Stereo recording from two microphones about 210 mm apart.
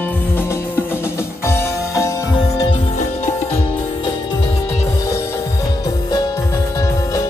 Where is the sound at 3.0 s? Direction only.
30° left (ahead or behind).